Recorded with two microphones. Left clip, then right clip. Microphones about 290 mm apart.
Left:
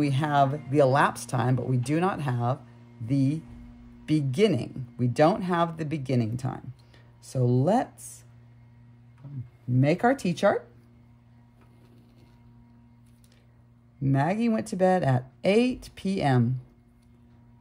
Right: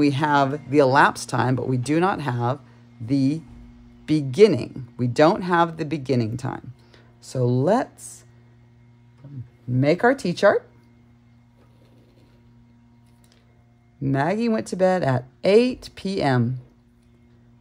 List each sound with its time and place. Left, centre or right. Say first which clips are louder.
0.0 s speech: right 5 dB; right
9.8 s speech: right 5 dB; right
14.0 s speech: right 4 dB; right